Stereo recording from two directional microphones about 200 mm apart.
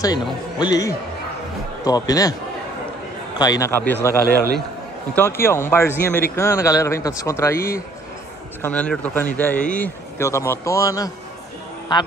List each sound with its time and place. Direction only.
0.0 s a man's voice: 20° left (ahead or behind)
3.3 s speech: 20° left (ahead or behind)
5.1 s speech: 10° left (ahead or behind)